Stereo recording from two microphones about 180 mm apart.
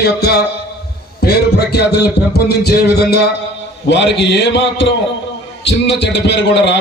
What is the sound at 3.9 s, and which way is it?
A man's voice, 75° left (ahead or behind).